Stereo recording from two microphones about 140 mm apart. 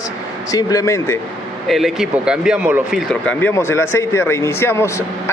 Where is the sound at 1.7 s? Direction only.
Centre (ahead or behind).